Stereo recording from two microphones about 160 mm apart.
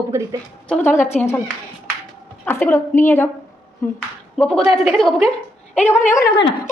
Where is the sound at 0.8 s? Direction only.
50° left (ahead or behind).